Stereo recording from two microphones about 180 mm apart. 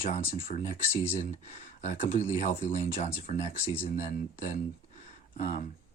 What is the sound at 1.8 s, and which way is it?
Speech, 40° left (ahead or behind).